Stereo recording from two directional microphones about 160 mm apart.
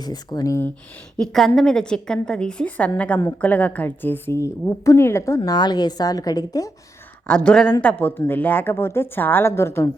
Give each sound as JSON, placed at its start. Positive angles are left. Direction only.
{"t": 0.0, "sound": "a woman's voice", "side_deg": 25}
{"t": 1.2, "sound": "a woman's voice", "side_deg": 5}
{"t": 7.3, "sound": "a woman's voice", "side_deg": 5}